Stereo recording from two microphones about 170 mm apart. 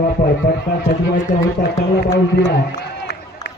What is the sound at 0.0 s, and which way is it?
A man's voice, 65° left (ahead or behind).